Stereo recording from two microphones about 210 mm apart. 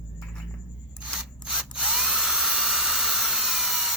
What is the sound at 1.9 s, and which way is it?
Dental drill, centre (ahead or behind).